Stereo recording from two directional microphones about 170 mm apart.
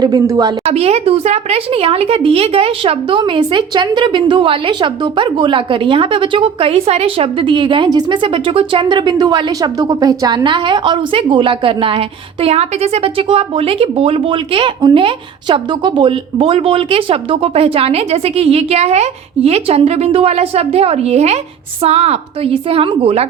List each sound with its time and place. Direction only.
0.0 s a woman's voice: 25° right (ahead or behind)
0.7 s speech: 35° right (ahead or behind)